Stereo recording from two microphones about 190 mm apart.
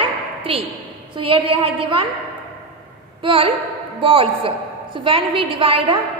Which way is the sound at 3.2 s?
25° right (ahead or behind).